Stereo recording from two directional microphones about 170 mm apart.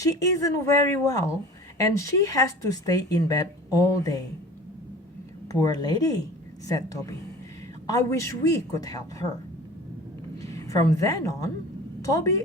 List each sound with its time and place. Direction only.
0.0 s speech: 20° left (ahead or behind)
5.5 s speech: 20° left (ahead or behind)
10.3 s a woman's voice: 20° left (ahead or behind)